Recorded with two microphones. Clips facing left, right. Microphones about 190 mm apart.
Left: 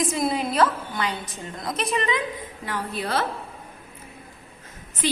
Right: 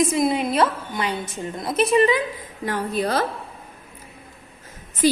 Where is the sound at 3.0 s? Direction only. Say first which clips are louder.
Right 4 dB; 40° right (ahead or behind).